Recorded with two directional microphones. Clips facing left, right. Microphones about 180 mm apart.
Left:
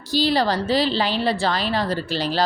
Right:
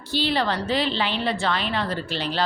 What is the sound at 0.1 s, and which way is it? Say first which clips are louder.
A woman's voice: left 4 dB; 40° left (ahead or behind).